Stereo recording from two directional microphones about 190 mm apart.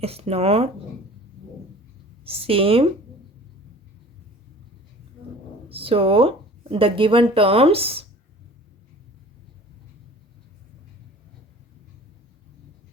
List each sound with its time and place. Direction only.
0.0 s speech: 30° right (ahead or behind)
2.2 s speech: 30° right (ahead or behind)
5.6 s speech: 30° right (ahead or behind)